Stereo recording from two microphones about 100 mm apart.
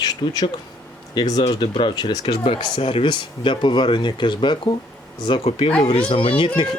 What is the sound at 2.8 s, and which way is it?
Speech, 65° left (ahead or behind).